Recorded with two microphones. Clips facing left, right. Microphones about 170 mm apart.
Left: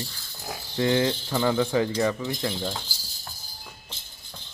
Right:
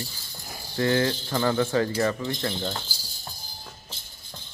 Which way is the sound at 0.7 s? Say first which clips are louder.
Even; 20° left (ahead or behind).